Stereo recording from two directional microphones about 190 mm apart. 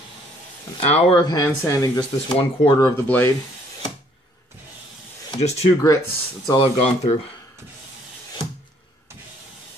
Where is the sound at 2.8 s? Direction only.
10° left (ahead or behind).